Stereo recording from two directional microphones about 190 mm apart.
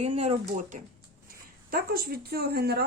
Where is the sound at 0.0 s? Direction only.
35° right (ahead or behind).